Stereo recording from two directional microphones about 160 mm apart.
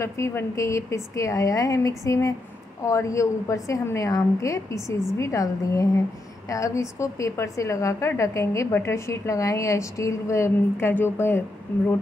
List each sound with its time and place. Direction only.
0.0 s a woman's voice: 15° left (ahead or behind)